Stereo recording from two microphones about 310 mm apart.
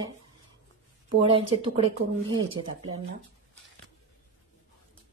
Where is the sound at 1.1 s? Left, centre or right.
Centre.